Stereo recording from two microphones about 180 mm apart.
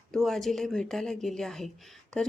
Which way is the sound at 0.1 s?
Centre (ahead or behind).